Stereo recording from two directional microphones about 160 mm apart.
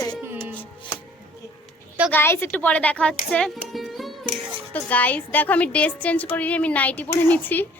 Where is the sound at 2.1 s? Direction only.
15° left (ahead or behind).